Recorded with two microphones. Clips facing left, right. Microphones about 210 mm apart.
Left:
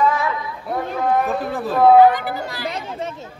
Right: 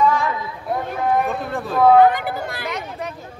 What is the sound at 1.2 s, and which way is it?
Speech, centre (ahead or behind).